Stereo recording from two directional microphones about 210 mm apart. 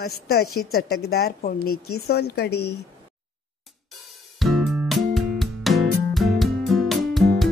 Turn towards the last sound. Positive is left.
turn(degrees=0)  # may be behind; listen again after turning